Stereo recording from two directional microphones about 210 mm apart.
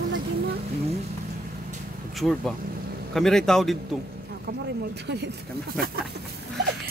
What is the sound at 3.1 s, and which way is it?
Speech, centre (ahead or behind).